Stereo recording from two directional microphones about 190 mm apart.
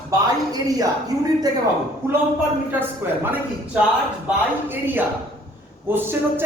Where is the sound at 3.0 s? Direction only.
10° right (ahead or behind).